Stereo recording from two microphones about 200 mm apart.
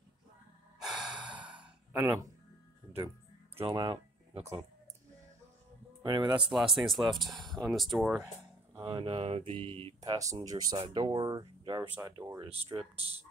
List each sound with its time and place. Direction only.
0.7 s gasp: centre (ahead or behind)
1.9 s speech: 10° right (ahead or behind)
3.5 s speech: 25° right (ahead or behind)
6.0 s speech: 20° right (ahead or behind)
6.5 s speech: centre (ahead or behind)
8.7 s speech: 25° right (ahead or behind)